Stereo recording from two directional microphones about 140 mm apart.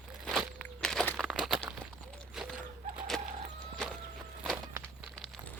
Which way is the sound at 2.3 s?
5° right (ahead or behind).